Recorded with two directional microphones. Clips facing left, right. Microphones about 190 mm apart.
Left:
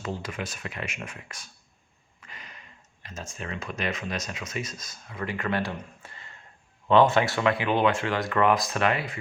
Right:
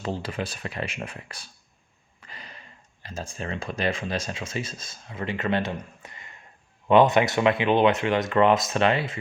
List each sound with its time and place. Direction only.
0.0 s speech: 30° right (ahead or behind)